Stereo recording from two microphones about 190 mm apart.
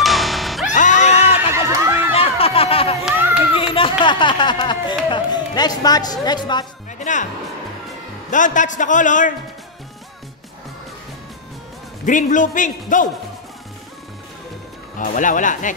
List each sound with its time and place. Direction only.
0.0 s music: centre (ahead or behind)
0.7 s music: 40° left (ahead or behind)
1.5 s chatter: 15° right (ahead or behind)
2.1 s a sound: 30° left (ahead or behind)
7.0 s music: 40° left (ahead or behind)
8.3 s a man's voice: 40° left (ahead or behind)
12.1 s a man's voice: 40° left (ahead or behind)
15.0 s a man's voice: 45° left (ahead or behind)